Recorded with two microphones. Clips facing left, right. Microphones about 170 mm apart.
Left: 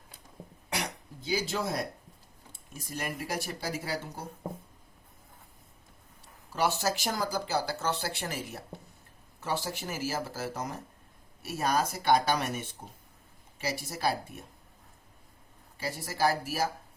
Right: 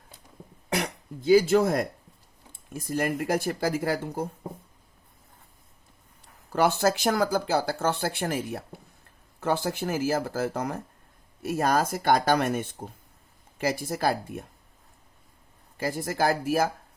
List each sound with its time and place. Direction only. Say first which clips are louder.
0.7 s speech: right 6 dB; 55° right (ahead or behind)
6.5 s speech: right 6 dB; 55° right (ahead or behind)
15.8 s speech: right 3 dB; 50° right (ahead or behind)